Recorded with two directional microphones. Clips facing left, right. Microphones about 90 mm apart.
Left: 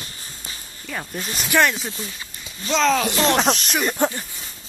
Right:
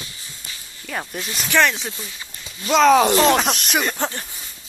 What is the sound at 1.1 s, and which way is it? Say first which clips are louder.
Speech: even; 45° left (ahead or behind).